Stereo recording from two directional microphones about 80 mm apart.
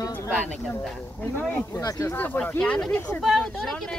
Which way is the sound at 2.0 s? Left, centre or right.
Left.